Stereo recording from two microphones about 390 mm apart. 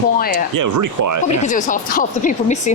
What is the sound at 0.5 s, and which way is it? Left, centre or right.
Speech, right.